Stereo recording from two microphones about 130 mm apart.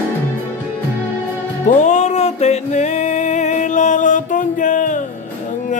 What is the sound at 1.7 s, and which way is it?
Music, 65° left (ahead or behind).